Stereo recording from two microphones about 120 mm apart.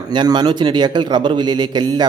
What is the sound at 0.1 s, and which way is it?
A man's voice, 40° right (ahead or behind).